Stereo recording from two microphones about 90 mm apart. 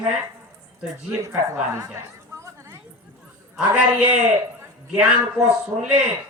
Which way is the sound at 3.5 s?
10° right (ahead or behind).